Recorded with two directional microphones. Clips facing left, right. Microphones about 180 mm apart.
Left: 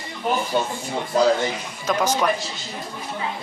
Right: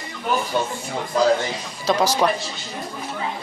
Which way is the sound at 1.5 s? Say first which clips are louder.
Right 2 dB; 35° right (ahead or behind).